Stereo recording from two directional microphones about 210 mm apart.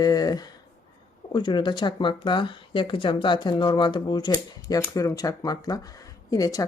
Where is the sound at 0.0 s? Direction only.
20° left (ahead or behind).